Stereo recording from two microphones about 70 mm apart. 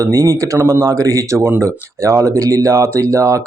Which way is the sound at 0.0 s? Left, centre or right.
Right.